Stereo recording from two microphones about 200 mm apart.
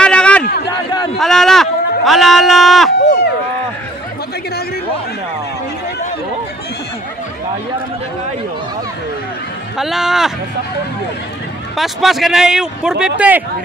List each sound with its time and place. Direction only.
0.0 s a sound: 5° left (ahead or behind)
3.0 s run: 60° left (ahead or behind)
9.8 s speech: centre (ahead or behind)
11.7 s speech: centre (ahead or behind)